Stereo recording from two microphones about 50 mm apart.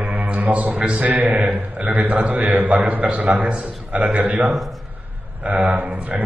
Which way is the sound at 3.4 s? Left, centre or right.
Right.